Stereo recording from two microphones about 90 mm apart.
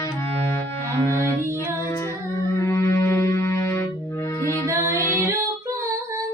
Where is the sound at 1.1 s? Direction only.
30° left (ahead or behind).